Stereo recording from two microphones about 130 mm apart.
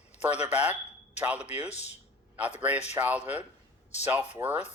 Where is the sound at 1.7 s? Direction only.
60° left (ahead or behind).